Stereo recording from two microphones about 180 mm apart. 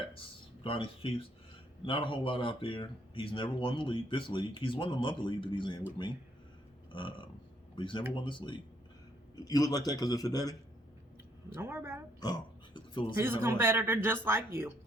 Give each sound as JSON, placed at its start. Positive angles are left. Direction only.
{"t": 0.6, "sound": "speech", "side_deg": 30}
{"t": 6.9, "sound": "speech", "side_deg": 25}
{"t": 11.5, "sound": "speech", "side_deg": -15}
{"t": 12.2, "sound": "a sound", "side_deg": 25}
{"t": 13.1, "sound": "speech", "side_deg": -15}